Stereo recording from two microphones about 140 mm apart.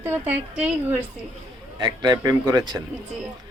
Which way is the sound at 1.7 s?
30° right (ahead or behind).